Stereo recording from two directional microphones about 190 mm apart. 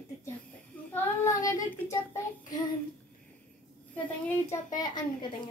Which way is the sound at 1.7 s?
15° left (ahead or behind).